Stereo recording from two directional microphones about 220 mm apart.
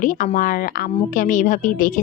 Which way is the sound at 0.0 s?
35° left (ahead or behind).